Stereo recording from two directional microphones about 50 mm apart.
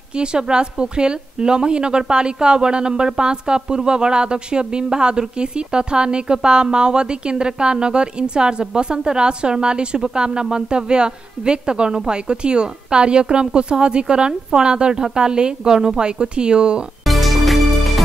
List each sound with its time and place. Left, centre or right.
0.2 s a woman's voice: centre
17.0 s music: centre